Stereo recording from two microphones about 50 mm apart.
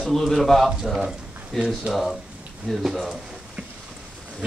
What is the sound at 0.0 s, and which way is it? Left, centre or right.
Speech, centre.